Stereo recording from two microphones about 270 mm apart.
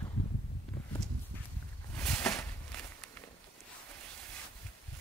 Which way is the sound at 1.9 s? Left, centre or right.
Centre.